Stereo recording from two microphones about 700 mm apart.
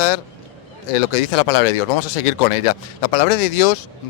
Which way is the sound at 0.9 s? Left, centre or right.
Left.